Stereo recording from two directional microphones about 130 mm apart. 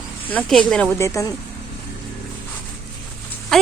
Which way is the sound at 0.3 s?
5° left (ahead or behind).